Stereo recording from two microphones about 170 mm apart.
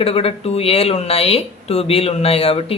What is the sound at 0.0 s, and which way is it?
Speech, 35° left (ahead or behind).